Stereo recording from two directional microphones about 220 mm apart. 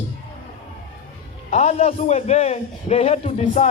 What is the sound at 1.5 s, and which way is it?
A man's voice, 30° left (ahead or behind).